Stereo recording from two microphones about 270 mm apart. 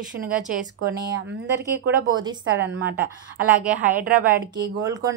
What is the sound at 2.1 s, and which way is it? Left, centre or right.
A woman's voice, centre.